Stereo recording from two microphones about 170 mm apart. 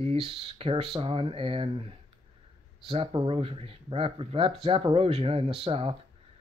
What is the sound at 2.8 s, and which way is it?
Speech, 30° right (ahead or behind).